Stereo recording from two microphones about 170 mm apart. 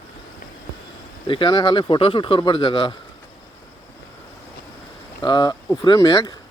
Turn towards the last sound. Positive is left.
turn(degrees=25)  # may be behind; listen again after turning